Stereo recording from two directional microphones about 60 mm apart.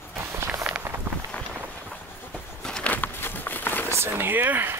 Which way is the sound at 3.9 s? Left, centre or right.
Right.